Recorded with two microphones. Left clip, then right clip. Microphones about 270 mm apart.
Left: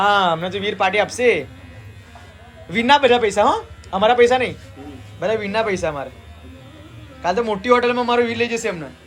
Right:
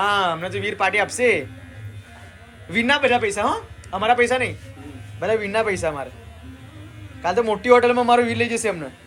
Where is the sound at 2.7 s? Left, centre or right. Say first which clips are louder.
Left 4 dB; centre.